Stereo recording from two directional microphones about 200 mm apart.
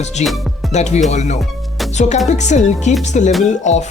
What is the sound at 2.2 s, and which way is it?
A woman's voice, 35° left (ahead or behind).